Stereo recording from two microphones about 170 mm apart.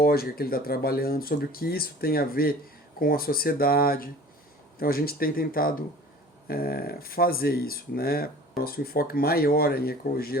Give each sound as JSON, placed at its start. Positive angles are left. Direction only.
{"t": 0.0, "sound": "speech", "side_deg": 60}